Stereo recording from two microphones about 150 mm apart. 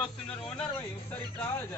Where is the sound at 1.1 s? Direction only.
10° left (ahead or behind).